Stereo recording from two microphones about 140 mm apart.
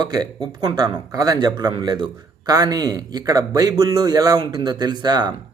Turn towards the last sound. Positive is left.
turn(degrees=-30)  # may be behind; listen again after turning